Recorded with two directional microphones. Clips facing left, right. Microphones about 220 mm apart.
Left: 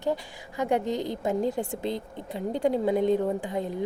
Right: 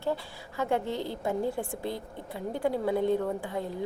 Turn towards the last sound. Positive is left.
turn(degrees=15)  # may be behind; listen again after turning